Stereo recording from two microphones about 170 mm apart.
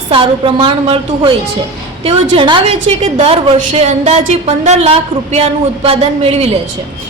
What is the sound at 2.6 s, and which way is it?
A woman's voice, 40° right (ahead or behind).